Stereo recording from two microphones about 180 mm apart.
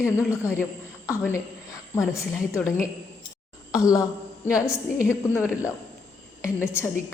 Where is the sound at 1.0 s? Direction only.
15° left (ahead or behind).